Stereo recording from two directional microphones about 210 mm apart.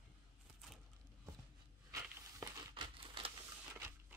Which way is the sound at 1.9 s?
20° right (ahead or behind).